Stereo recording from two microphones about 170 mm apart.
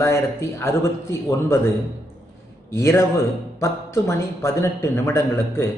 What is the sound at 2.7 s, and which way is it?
A man's voice, 15° left (ahead or behind).